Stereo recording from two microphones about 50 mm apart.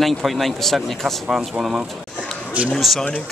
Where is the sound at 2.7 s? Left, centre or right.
Centre.